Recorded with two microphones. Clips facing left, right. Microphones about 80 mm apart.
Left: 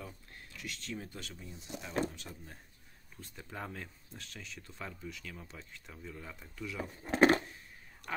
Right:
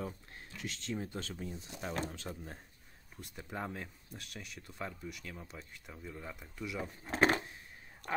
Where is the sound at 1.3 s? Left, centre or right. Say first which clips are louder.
Right 2 dB; right.